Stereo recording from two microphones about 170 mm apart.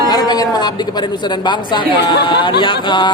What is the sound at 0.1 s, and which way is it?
Speech, 25° left (ahead or behind).